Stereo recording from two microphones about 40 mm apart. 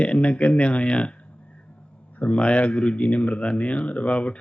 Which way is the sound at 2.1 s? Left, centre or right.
Left.